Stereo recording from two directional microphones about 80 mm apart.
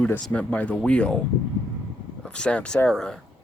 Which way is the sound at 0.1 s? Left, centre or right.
Centre.